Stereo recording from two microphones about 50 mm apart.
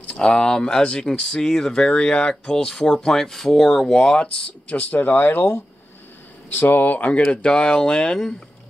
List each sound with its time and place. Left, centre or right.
0.0 s speech: centre
3.9 s speech: centre
4.9 s speech: left
6.5 s speech: left
7.2 s speech: centre